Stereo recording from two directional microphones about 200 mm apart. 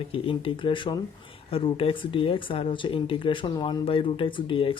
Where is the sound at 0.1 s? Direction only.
25° left (ahead or behind).